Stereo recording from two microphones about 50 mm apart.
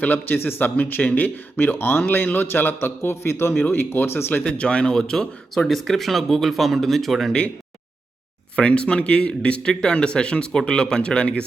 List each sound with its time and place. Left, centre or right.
0.0 s a man's voice: left
2.0 s a man's voice: left
4.4 s speech: left
5.6 s speech: centre
8.5 s speech: left